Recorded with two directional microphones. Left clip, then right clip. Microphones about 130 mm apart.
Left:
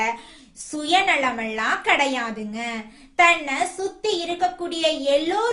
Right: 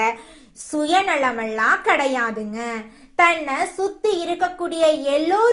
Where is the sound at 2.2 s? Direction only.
25° left (ahead or behind).